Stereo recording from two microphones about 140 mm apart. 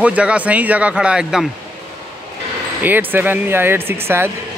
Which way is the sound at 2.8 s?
15° right (ahead or behind).